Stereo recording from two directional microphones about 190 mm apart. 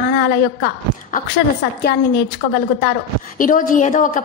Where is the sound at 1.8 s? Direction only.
60° left (ahead or behind).